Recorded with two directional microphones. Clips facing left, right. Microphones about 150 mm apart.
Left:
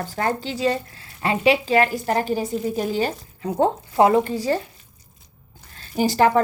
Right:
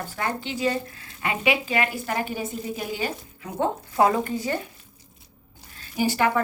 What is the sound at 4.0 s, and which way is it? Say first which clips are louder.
Speech: left 4 dB; 25° left (ahead or behind).